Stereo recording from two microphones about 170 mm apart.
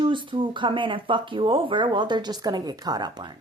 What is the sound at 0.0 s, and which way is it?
Speech, 30° right (ahead or behind).